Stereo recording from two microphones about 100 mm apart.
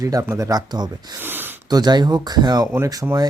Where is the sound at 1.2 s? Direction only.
20° right (ahead or behind).